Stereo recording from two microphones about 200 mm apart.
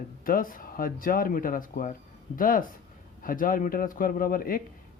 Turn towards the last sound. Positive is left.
turn(degrees=45)  # may be behind; listen again after turning